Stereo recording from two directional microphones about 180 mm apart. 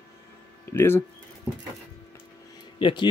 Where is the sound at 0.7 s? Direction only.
15° left (ahead or behind).